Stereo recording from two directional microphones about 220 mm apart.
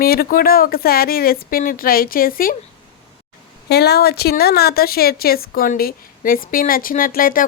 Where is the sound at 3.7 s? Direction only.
45° left (ahead or behind).